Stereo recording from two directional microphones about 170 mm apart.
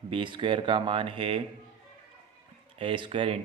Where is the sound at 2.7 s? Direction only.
30° right (ahead or behind).